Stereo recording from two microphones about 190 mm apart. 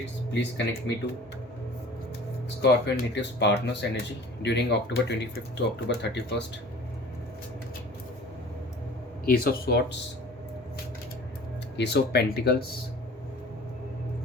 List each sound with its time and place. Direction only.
0.0 s speech: 65° left (ahead or behind)
2.6 s speech: 60° left (ahead or behind)
9.2 s speech: 50° left (ahead or behind)
11.8 s speech: 60° left (ahead or behind)